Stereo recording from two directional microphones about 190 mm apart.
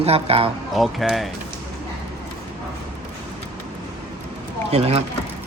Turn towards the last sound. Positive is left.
turn(degrees=-30)  # may be behind; listen again after turning